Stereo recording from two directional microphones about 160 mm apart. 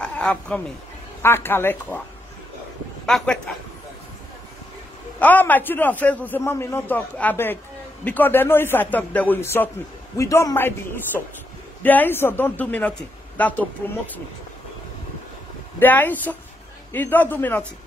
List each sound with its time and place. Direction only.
0.0 s a sound: 5° left (ahead or behind)
1.2 s a man's voice: 15° left (ahead or behind)
3.1 s speech: 5° left (ahead or behind)
5.2 s a man's voice: 10° left (ahead or behind)
11.8 s a man's voice: 10° left (ahead or behind)
15.8 s a man's voice: 10° left (ahead or behind)